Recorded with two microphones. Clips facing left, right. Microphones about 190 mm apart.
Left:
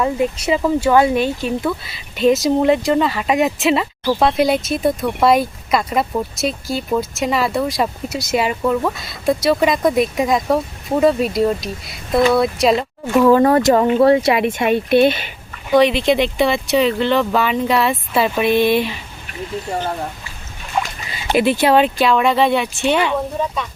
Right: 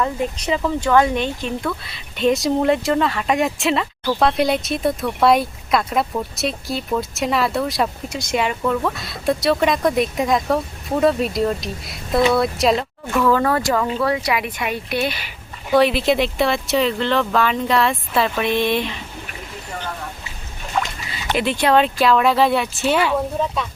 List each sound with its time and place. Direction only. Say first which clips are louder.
0.0 s speech: left 4 dB; 10° left (ahead or behind)
13.2 s speech: left 6 dB; 20° left (ahead or behind)
15.7 s speech: left 2 dB; 5° right (ahead or behind)
21.3 s speech: left 3 dB; 5° left (ahead or behind)